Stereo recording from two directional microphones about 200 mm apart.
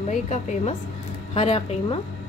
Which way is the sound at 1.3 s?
30° left (ahead or behind).